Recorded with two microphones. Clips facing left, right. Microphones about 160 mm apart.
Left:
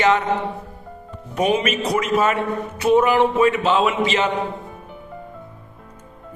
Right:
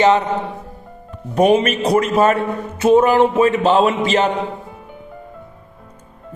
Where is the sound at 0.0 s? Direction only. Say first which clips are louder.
Right 4 dB; 30° right (ahead or behind).